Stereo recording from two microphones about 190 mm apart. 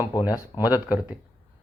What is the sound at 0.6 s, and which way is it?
Speech, 10° right (ahead or behind).